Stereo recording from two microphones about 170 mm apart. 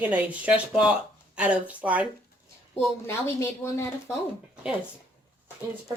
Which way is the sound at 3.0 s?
15° left (ahead or behind).